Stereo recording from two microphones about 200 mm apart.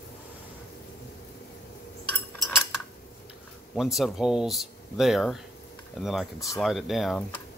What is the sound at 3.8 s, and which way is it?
Speech, centre (ahead or behind).